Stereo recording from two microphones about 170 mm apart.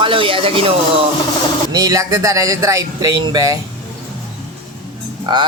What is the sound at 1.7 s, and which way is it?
Speech, 20° right (ahead or behind).